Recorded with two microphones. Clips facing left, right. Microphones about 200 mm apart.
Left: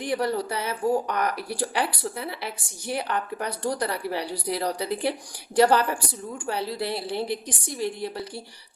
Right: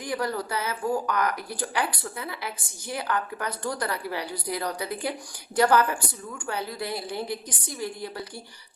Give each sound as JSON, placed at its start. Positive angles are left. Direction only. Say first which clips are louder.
{"t": 0.0, "sound": "speech", "louder": "left 3 dB", "side_deg": 25}